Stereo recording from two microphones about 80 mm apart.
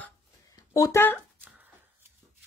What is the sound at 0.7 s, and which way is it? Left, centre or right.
Speech, left.